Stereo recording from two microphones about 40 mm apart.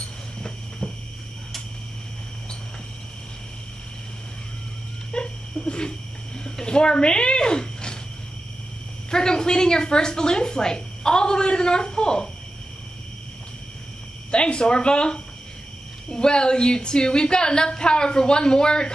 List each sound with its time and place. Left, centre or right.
0.4 s cricket: centre
5.1 s a sound: left
9.1 s a woman's voice: centre
14.3 s a woman's voice: left